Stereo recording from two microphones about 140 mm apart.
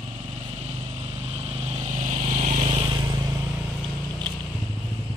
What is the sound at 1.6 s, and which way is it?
Vehicle, 55° right (ahead or behind).